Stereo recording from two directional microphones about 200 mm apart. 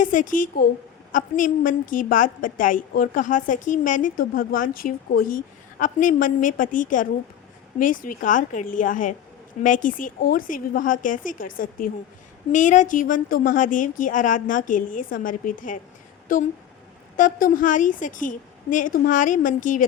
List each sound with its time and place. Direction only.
0.0 s a woman's voice: 40° left (ahead or behind)